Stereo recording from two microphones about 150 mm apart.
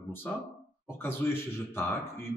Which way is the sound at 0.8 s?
15° left (ahead or behind).